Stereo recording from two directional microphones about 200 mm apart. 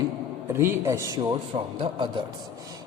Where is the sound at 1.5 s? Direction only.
30° right (ahead or behind).